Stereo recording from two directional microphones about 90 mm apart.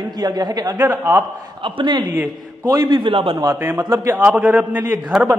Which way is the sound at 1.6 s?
65° right (ahead or behind).